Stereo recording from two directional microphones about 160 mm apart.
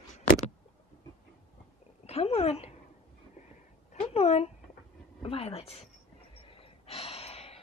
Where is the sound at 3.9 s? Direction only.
40° left (ahead or behind).